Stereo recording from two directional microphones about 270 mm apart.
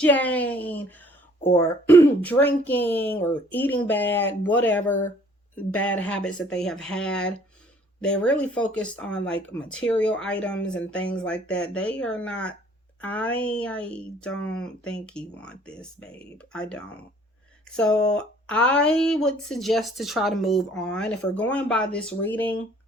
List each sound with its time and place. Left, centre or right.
0.0 s speech: centre